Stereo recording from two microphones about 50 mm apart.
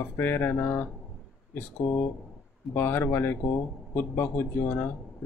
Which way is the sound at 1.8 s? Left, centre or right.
Left.